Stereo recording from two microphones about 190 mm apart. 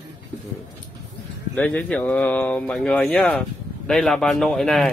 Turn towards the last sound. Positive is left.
turn(degrees=0)  # may be behind; listen again after turning